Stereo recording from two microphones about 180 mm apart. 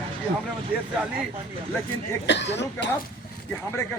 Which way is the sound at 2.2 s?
75° left (ahead or behind).